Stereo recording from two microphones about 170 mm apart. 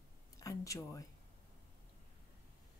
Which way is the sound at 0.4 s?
20° left (ahead or behind).